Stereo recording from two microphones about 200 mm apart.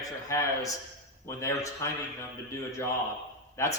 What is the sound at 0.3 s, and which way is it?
A man's voice, 15° left (ahead or behind).